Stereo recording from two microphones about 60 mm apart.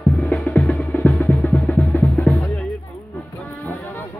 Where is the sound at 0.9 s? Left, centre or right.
Left.